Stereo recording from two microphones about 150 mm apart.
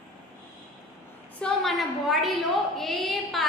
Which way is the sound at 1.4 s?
Centre (ahead or behind).